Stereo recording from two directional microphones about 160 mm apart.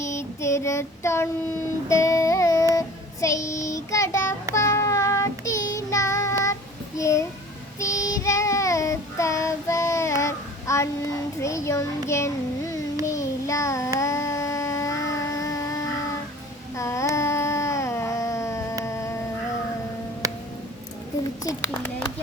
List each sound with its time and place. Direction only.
0.0 s child singing: 15° left (ahead or behind)
1.9 s carnatic music: 20° left (ahead or behind)
2.7 s child singing: 20° left (ahead or behind)
16.7 s a sound: 20° left (ahead or behind)
18.9 s humming: 20° left (ahead or behind)
21.4 s a sound: 15° left (ahead or behind)